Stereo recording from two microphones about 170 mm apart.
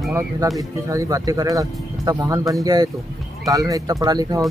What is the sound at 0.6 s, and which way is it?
Speech, 20° right (ahead or behind).